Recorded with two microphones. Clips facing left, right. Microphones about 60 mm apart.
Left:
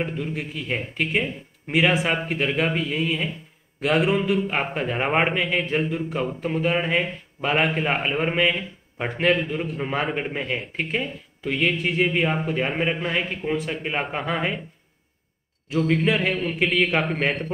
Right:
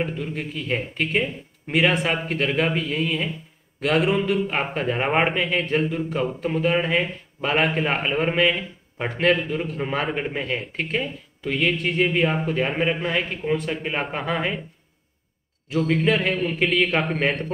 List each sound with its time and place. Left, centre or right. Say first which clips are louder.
0.0 s speech: even; centre
15.7 s speech: even; centre